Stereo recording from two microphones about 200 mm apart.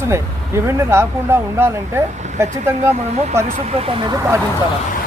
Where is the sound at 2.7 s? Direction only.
35° right (ahead or behind).